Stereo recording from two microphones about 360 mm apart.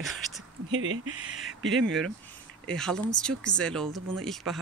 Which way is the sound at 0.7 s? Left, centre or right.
Right.